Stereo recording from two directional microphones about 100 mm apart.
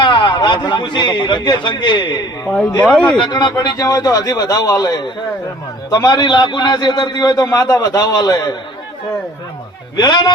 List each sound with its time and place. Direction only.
0.0 s a man's voice: 55° left (ahead or behind)
2.8 s speech: 5° left (ahead or behind)
3.2 s a man's voice: 50° left (ahead or behind)
10.0 s speech: 45° left (ahead or behind)